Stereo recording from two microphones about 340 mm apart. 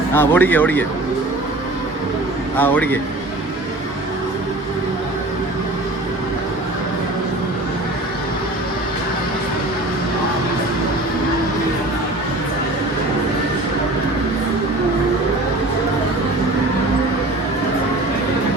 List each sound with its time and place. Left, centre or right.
0.1 s speech: centre
2.6 s speech: centre